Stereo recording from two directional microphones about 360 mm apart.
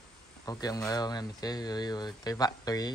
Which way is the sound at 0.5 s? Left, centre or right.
Centre.